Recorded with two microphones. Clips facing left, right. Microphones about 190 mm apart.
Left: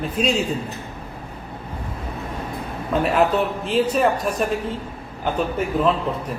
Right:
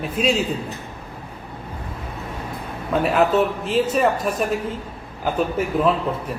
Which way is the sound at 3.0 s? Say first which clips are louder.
Right 2 dB; centre (ahead or behind).